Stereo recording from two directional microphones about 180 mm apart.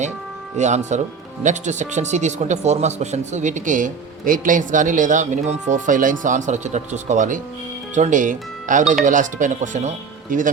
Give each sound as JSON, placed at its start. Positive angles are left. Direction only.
{"t": 0.5, "sound": "speech", "side_deg": -40}